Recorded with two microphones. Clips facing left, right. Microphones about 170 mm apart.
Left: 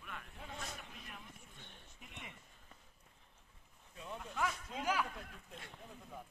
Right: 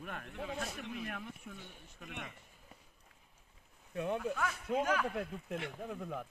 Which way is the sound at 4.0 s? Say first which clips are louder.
Right 6 dB; 70° right (ahead or behind).